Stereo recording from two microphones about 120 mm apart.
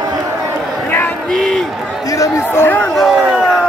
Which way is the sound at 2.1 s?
25° left (ahead or behind).